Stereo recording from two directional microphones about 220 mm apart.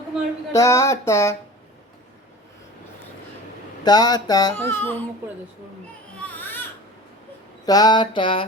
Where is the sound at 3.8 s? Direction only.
20° left (ahead or behind).